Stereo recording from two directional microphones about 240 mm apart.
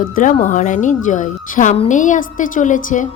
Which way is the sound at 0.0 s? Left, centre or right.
Left.